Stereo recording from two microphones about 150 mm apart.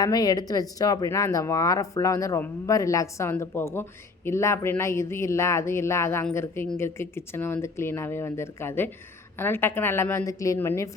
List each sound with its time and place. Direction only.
0.0 s speech: 25° left (ahead or behind)